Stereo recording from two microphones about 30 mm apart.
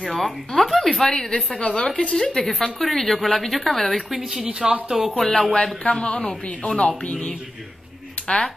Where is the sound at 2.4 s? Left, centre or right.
Centre.